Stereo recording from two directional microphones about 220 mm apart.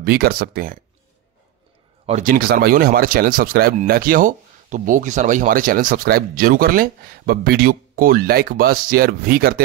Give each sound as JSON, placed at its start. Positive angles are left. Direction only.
{"t": 0.0, "sound": "speech", "side_deg": -45}
{"t": 2.0, "sound": "speech", "side_deg": -35}